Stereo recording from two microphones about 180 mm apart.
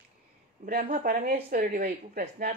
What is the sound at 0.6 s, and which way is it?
A woman's voice, 50° right (ahead or behind).